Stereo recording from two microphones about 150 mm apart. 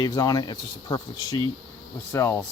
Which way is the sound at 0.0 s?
25° left (ahead or behind).